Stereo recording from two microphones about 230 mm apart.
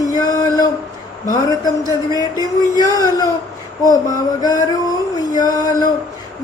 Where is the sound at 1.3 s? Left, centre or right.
Centre.